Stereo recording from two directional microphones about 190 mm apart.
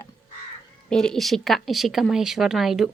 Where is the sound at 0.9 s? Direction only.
5° left (ahead or behind).